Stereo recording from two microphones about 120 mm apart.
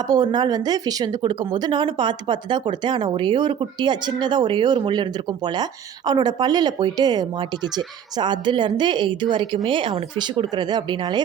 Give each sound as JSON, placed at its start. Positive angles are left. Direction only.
{"t": 0.1, "sound": "speech", "side_deg": -35}